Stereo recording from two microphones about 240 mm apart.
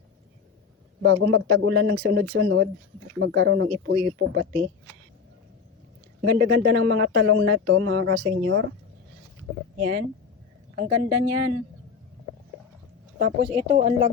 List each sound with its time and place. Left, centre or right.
1.0 s speech: right
6.2 s speech: right
10.8 s speech: right
13.1 s speech: right
13.5 s speech: right